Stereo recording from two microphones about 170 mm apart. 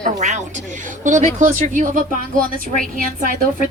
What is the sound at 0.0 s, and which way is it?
A woman's voice, 45° right (ahead or behind).